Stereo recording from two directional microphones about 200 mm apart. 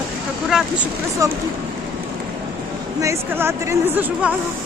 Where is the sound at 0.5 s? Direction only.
5° right (ahead or behind).